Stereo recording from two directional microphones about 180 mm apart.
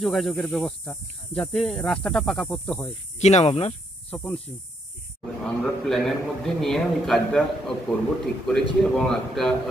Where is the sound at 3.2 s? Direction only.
40° left (ahead or behind).